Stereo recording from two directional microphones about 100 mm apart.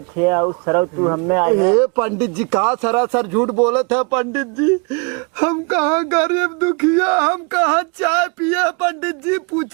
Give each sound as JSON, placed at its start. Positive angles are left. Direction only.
{"t": 0.2, "sound": "speech", "side_deg": -25}
{"t": 3.7, "sound": "speech", "side_deg": -15}